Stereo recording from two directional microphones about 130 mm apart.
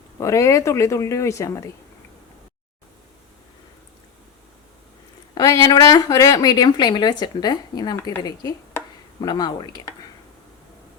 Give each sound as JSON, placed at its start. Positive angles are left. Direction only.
{"t": 0.2, "sound": "speech", "side_deg": 25}
{"t": 5.3, "sound": "speech", "side_deg": 30}
{"t": 9.2, "sound": "speech", "side_deg": 30}